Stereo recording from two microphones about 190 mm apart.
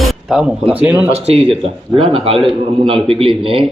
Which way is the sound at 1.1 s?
35° right (ahead or behind).